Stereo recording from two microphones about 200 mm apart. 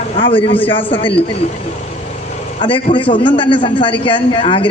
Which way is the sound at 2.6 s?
25° left (ahead or behind).